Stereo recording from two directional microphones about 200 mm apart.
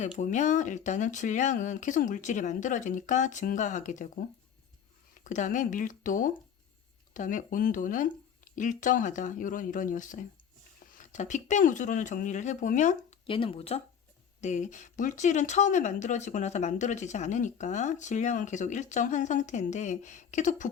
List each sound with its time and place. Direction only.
0.2 s speech: 40° left (ahead or behind)
5.2 s speech: 40° left (ahead or behind)
13.2 s speech: 25° left (ahead or behind)